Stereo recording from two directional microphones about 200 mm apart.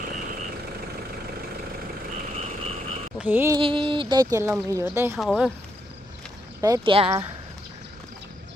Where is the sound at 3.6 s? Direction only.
25° right (ahead or behind).